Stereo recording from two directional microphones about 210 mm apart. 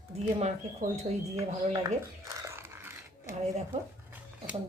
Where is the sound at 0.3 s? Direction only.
30° right (ahead or behind).